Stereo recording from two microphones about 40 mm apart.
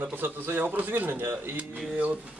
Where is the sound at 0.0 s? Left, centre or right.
Right.